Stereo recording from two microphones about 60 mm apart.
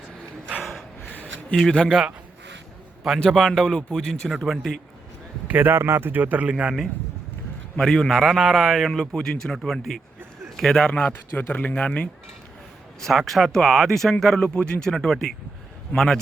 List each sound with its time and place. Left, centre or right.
0.6 s a sound: centre
1.0 s a sound: left
1.5 s speech: centre
3.2 s speech: centre
4.4 s speech: centre
5.5 s speech: right
5.7 s a man's voice: right; by 6.7 s centre
7.8 s speech: centre
11.3 s speech: left
11.8 s speech: centre
13.0 s speech: centre